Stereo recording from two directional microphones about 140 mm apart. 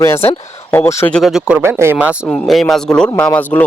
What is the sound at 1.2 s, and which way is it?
Speech, 5° right (ahead or behind).